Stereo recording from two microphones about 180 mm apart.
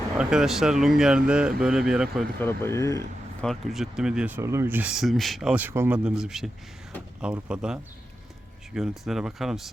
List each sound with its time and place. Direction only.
0.2 s speech: 5° right (ahead or behind)
2.4 s speech: 10° left (ahead or behind)
3.4 s speech: centre (ahead or behind)